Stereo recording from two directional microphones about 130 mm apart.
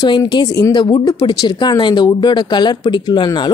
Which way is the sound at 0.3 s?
35° left (ahead or behind).